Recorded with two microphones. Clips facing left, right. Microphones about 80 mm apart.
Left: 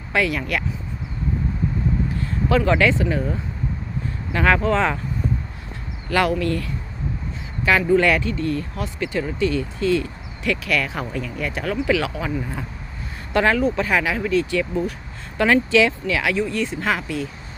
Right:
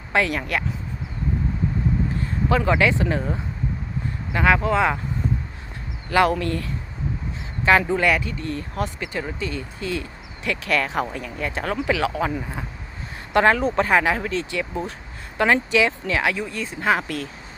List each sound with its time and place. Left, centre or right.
0.1 s speech: right
2.1 s a sound: centre
3.0 s speech: right
4.3 s speech: centre
6.1 s speech: right
13.3 s speech: right
14.5 s speech: right